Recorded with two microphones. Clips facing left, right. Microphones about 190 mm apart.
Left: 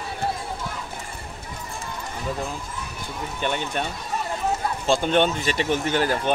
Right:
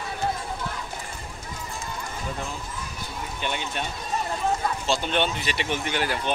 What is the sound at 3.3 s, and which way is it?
Speech, 50° left (ahead or behind).